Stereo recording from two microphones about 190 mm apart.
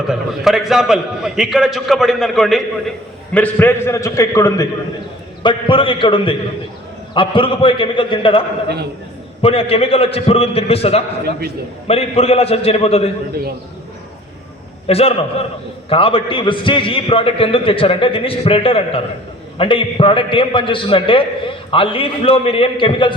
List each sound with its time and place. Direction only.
0.1 s a man's voice: centre (ahead or behind); by 13.1 s 30° left (ahead or behind)
14.8 s a man's voice: 30° left (ahead or behind)